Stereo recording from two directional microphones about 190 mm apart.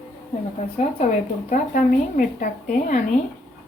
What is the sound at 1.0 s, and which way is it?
A woman's voice, 40° left (ahead or behind).